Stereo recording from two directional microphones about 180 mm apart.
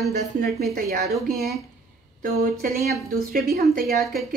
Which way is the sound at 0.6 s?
60° right (ahead or behind).